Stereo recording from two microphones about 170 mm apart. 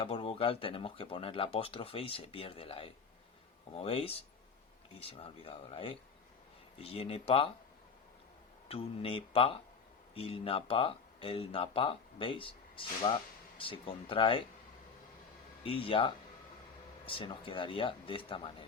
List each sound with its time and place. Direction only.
0.0 s speech: 35° left (ahead or behind)
8.6 s speech: 35° left (ahead or behind)
15.6 s speech: 35° left (ahead or behind)